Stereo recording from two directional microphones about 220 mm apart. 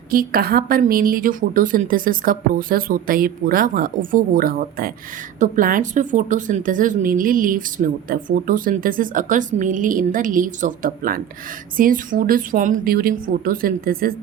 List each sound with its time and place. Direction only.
0.1 s a woman's voice: 40° right (ahead or behind)